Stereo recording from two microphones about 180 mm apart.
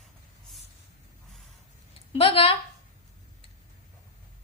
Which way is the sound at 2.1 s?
30° left (ahead or behind).